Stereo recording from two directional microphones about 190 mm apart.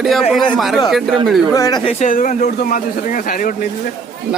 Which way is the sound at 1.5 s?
20° left (ahead or behind).